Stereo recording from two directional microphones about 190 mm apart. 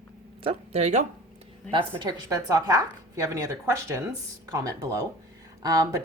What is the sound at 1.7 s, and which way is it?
Speech, 25° right (ahead or behind).